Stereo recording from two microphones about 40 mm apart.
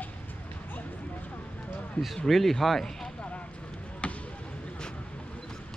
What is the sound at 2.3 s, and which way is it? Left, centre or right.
Speech, centre.